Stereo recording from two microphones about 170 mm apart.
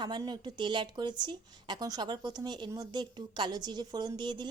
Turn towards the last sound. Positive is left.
turn(degrees=-25)  # may be behind; listen again after turning